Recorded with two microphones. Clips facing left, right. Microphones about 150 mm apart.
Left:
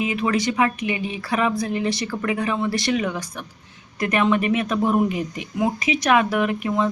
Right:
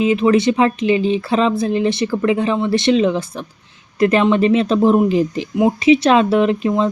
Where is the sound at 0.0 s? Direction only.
25° right (ahead or behind).